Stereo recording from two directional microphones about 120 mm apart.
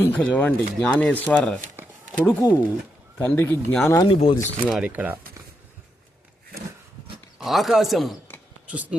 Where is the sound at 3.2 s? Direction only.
20° left (ahead or behind).